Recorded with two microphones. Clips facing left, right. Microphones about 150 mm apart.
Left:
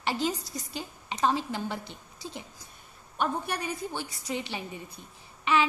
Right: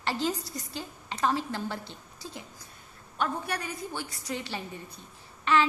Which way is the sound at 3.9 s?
20° left (ahead or behind).